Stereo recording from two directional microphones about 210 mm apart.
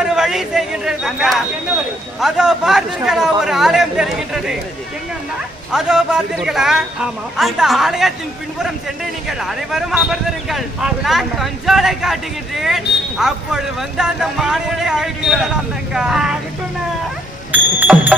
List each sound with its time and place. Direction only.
0.0 s speech: 5° right (ahead or behind)
5.7 s speech: 5° right (ahead or behind)
9.4 s speech: centre (ahead or behind)
17.5 s a sound: 10° right (ahead or behind)